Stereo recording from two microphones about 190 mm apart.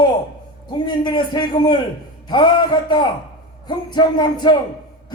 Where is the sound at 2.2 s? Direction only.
25° left (ahead or behind).